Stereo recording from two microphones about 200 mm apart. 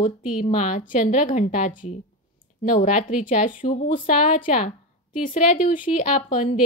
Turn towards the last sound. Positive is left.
turn(degrees=40)  # may be behind; listen again after turning